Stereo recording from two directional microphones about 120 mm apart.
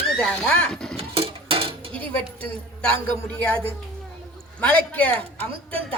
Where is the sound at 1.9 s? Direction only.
15° left (ahead or behind).